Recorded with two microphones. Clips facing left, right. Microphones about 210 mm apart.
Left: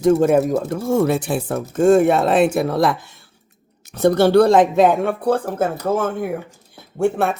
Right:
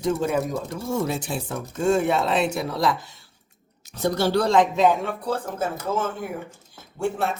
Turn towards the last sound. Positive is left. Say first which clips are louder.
# left 7 dB
turn(degrees=60)  # may be behind; listen again after turning